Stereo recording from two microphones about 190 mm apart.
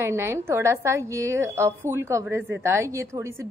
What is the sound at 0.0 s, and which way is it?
A woman's voice, 15° right (ahead or behind).